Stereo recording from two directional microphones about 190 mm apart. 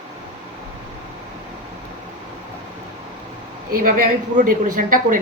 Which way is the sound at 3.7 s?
45° right (ahead or behind).